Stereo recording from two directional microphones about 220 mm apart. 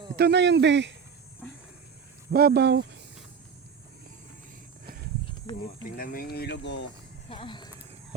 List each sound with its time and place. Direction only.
0.2 s speech: 50° right (ahead or behind)
2.3 s speech: 45° right (ahead or behind)
6.0 s speech: 40° left (ahead or behind)
7.3 s speech: 20° left (ahead or behind)